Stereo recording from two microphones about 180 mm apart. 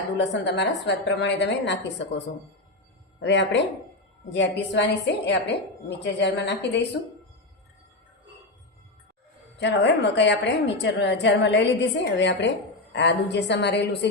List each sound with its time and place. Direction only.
0.2 s a woman's voice: 75° left (ahead or behind)
9.6 s a woman's voice: 75° left (ahead or behind)
12.9 s a woman's voice: 70° left (ahead or behind)